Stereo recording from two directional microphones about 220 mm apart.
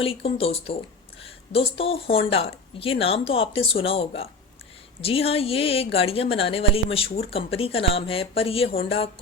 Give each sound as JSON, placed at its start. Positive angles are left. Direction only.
{"t": 0.0, "sound": "a woman's voice", "side_deg": 25}